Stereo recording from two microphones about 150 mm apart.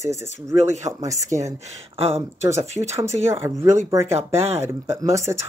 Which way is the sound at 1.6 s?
45° right (ahead or behind).